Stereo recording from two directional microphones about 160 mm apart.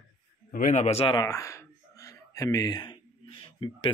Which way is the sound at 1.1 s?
20° left (ahead or behind).